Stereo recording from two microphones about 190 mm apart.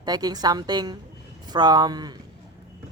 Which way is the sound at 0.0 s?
20° right (ahead or behind).